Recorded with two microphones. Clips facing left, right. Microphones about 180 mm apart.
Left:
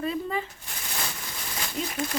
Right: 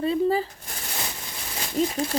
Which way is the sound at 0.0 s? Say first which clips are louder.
Right 7 dB; 35° right (ahead or behind).